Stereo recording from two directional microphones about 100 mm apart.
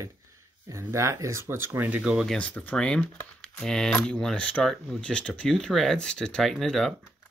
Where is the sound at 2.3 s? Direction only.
15° left (ahead or behind).